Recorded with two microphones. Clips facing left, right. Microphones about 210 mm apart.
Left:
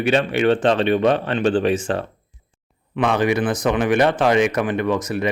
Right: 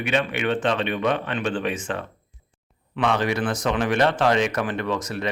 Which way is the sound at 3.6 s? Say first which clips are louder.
Left 5 dB; 5° left (ahead or behind).